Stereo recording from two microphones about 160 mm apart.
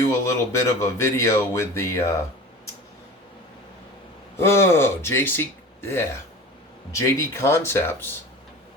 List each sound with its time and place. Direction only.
0.3 s speech: 20° left (ahead or behind)
4.4 s speech: 15° left (ahead or behind)